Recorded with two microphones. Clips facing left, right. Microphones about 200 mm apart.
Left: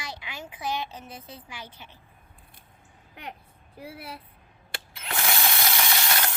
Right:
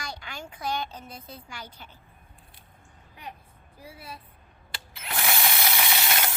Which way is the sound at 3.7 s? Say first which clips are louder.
Left 4 dB; 75° left (ahead or behind).